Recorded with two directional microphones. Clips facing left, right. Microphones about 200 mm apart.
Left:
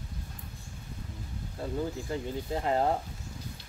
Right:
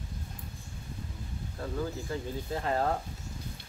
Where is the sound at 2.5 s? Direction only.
15° left (ahead or behind).